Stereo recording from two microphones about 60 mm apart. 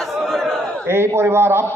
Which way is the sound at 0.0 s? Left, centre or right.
Centre.